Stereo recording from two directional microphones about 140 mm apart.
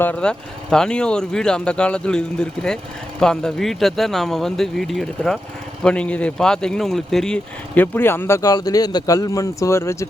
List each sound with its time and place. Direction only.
0.0 s speech: 10° left (ahead or behind)